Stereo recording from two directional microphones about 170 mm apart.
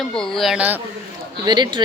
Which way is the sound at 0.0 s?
Centre (ahead or behind).